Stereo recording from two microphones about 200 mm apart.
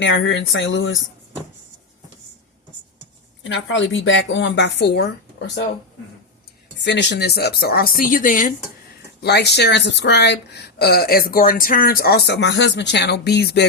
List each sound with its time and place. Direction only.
0.0 s speech: 70° left (ahead or behind)
3.4 s speech: 70° left (ahead or behind)
6.8 s speech: 60° left (ahead or behind); by 8.5 s 40° left (ahead or behind)
9.2 s speech: 55° left (ahead or behind)